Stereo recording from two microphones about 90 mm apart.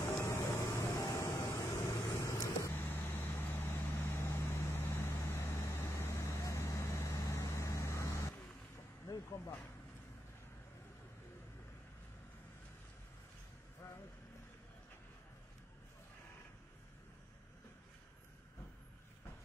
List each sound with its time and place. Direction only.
0.0 s vehicle: 30° left (ahead or behind)